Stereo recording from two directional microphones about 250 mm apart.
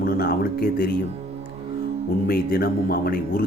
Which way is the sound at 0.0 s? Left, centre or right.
Left.